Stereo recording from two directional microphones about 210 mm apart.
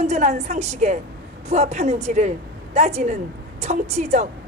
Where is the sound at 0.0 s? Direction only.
30° right (ahead or behind).